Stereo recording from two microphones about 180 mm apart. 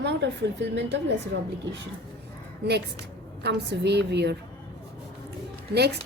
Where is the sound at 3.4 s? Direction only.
70° right (ahead or behind).